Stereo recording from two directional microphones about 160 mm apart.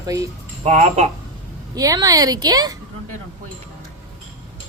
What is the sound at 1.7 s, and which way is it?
A woman's voice, 20° right (ahead or behind).